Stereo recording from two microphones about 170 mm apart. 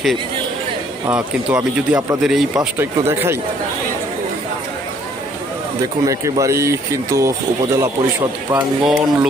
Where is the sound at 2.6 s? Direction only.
15° right (ahead or behind).